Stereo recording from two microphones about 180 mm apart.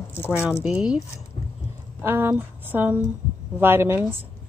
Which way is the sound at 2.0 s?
15° right (ahead or behind).